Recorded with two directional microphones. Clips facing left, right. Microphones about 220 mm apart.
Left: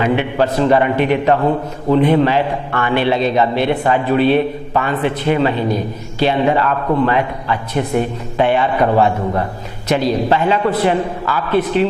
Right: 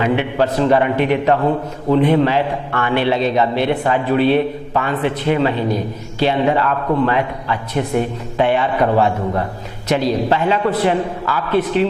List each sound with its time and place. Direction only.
0.0 s a man's voice: 15° left (ahead or behind)